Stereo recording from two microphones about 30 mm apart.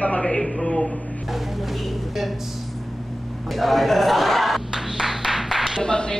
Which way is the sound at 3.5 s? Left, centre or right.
Centre.